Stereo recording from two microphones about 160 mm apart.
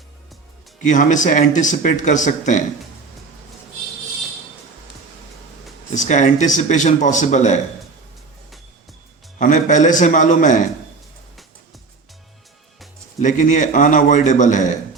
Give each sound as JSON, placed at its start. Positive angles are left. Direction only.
{"t": 0.9, "sound": "speech", "side_deg": 50}
{"t": 5.9, "sound": "speech", "side_deg": 50}
{"t": 9.4, "sound": "speech", "side_deg": 50}
{"t": 13.1, "sound": "speech", "side_deg": 50}